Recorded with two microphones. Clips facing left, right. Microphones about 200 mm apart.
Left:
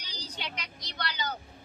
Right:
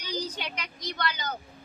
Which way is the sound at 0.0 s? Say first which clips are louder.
Right 8 dB; 50° right (ahead or behind).